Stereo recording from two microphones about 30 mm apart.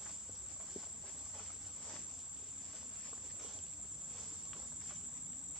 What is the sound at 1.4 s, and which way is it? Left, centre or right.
Cricket, left.